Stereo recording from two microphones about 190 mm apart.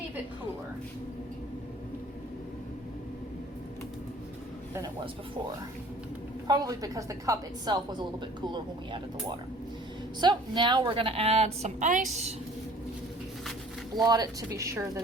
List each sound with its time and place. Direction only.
6.5 s a woman's voice: 20° right (ahead or behind)
10.2 s a woman's voice: 25° right (ahead or behind); by 12.3 s 40° right (ahead or behind)
14.1 s speech: 20° right (ahead or behind)